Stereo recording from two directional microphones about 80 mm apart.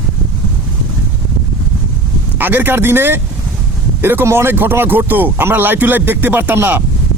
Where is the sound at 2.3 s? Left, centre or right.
Right.